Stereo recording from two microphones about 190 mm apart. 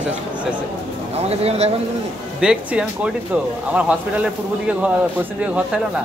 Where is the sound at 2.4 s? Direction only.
5° right (ahead or behind).